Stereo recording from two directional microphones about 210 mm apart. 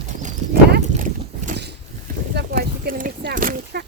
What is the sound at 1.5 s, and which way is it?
Mechanisms, 55° right (ahead or behind).